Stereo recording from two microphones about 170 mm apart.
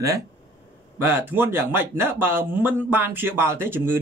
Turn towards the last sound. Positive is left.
turn(degrees=-15)  # may be behind; listen again after turning